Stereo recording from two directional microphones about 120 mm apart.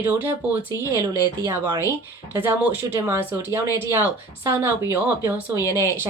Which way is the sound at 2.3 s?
15° right (ahead or behind).